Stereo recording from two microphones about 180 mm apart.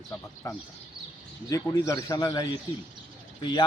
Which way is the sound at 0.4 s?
20° left (ahead or behind).